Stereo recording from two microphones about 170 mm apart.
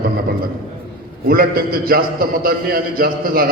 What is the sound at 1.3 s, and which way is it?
A man's voice, 60° right (ahead or behind).